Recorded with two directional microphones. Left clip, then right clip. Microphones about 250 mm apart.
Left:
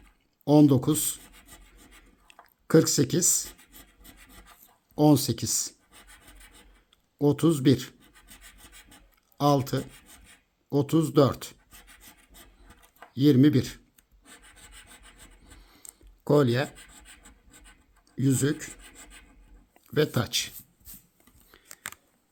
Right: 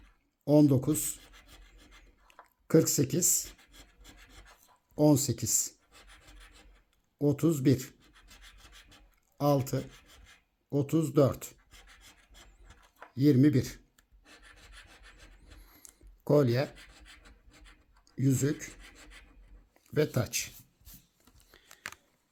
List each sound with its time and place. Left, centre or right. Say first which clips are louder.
0.4 s speech: left 4 dB; centre
2.3 s a sound: left 4 dB; centre
4.4 s writing: left 3 dB; centre
7.2 s speech: left 5 dB; centre
9.4 s speech: left 4 dB; centre
13.1 s speech: left 4 dB; centre
15.8 s a sound: left 4 dB; centre
18.1 s speech: left 4 dB; centre
19.7 s speech: left 4 dB; centre
21.5 s scissors: left 3 dB; centre